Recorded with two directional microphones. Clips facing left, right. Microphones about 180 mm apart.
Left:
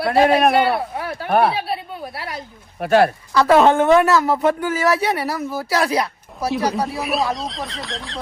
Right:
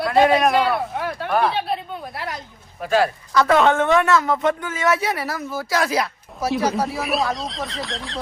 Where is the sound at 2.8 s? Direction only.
60° left (ahead or behind).